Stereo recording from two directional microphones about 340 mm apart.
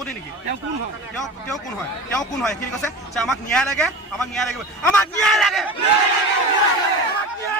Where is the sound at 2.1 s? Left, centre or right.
Centre.